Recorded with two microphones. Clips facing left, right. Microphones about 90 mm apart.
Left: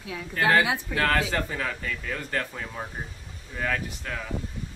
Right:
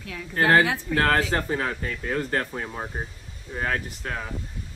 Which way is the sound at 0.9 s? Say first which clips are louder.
Right 3 dB; 35° right (ahead or behind).